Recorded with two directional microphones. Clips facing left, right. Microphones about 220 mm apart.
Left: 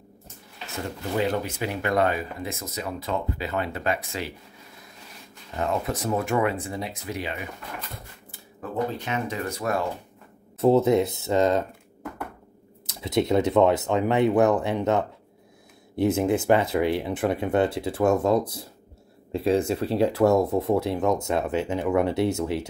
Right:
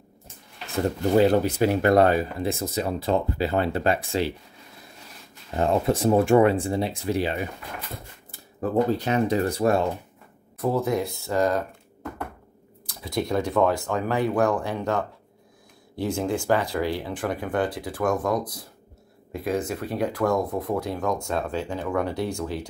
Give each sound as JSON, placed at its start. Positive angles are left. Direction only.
{"t": 0.8, "sound": "speech", "side_deg": -35}
{"t": 5.6, "sound": "speech", "side_deg": -30}
{"t": 10.6, "sound": "speech", "side_deg": 25}
{"t": 12.8, "sound": "speech", "side_deg": 25}